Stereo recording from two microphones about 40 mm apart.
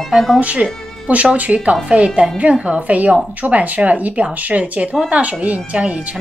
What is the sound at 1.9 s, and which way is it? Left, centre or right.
Speech, right.